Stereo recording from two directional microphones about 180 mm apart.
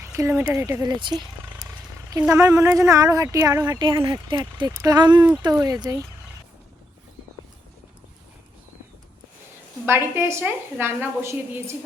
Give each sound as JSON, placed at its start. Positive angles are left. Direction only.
{"t": 0.0, "sound": "a sound", "side_deg": -15}
{"t": 0.5, "sound": "speech", "side_deg": -15}
{"t": 2.2, "sound": "speech", "side_deg": -15}
{"t": 9.8, "sound": "a woman's voice", "side_deg": -15}